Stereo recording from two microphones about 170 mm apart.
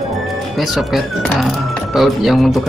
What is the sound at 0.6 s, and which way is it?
Speech, centre (ahead or behind).